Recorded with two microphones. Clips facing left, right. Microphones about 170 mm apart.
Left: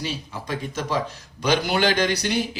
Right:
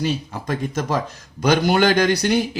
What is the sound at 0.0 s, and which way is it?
Speech, 50° right (ahead or behind).